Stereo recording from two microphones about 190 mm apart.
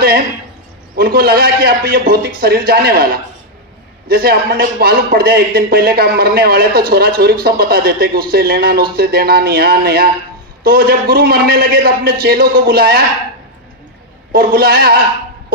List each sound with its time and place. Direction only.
0.9 s a man's voice: 55° right (ahead or behind)
14.3 s a man's voice: 50° right (ahead or behind)